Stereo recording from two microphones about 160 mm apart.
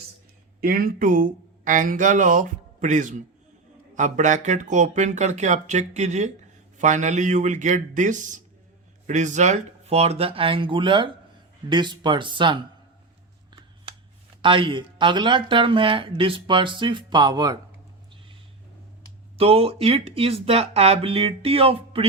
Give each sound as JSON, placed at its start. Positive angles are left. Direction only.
{"t": 0.6, "sound": "speech", "side_deg": -65}
{"t": 14.4, "sound": "speech", "side_deg": -30}
{"t": 19.4, "sound": "speech", "side_deg": -35}